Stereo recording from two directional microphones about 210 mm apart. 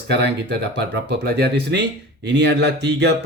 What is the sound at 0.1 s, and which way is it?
Speech, 50° right (ahead or behind).